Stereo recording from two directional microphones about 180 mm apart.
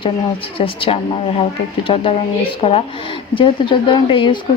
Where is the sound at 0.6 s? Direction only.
30° left (ahead or behind).